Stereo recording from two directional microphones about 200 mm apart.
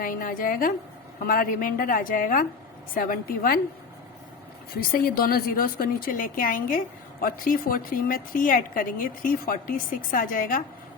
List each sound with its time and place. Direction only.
0.0 s a woman's voice: 45° left (ahead or behind)
4.7 s a woman's voice: 45° left (ahead or behind)